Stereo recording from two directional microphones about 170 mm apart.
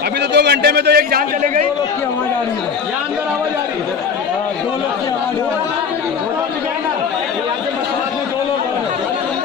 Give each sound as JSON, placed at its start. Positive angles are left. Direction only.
{"t": 0.3, "sound": "a man's voice", "side_deg": -75}